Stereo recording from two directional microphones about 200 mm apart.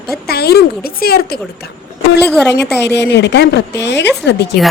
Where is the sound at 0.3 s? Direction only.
50° left (ahead or behind).